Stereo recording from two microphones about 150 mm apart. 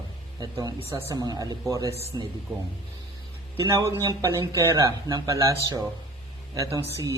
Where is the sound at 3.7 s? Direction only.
20° right (ahead or behind).